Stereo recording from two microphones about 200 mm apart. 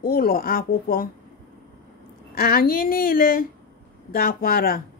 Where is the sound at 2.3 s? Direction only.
45° left (ahead or behind).